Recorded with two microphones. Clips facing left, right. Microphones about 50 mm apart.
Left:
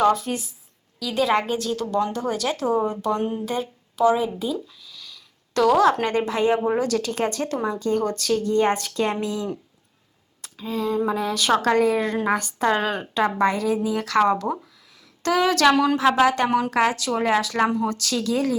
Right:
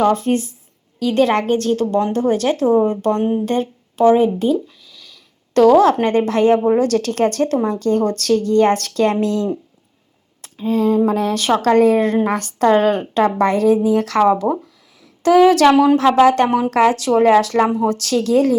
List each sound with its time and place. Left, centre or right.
0.1 s a woman's voice: right
4.9 s a sound: right
6.2 s speech: right
8.4 s a woman's voice: right
10.4 s a woman's voice: right
12.3 s a woman's voice: right
15.2 s a woman's voice: right
15.7 s speech: centre
16.2 s a woman's voice: right
17.1 s speech: right
17.8 s a woman's voice: right